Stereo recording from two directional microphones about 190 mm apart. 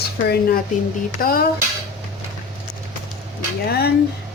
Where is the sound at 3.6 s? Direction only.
55° left (ahead or behind).